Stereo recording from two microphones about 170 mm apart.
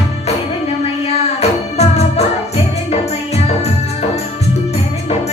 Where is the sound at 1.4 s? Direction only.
40° left (ahead or behind).